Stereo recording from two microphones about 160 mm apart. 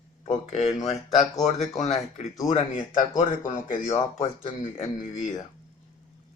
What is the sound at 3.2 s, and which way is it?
Speech, 55° left (ahead or behind).